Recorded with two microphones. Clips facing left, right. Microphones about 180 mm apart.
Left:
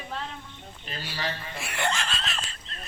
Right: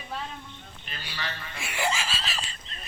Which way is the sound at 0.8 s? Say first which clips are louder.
Left 5 dB; 35° left (ahead or behind).